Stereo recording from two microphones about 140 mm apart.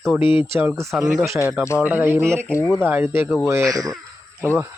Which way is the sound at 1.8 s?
15° right (ahead or behind).